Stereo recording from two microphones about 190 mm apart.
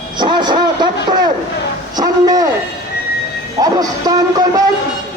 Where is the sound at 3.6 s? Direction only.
20° right (ahead or behind).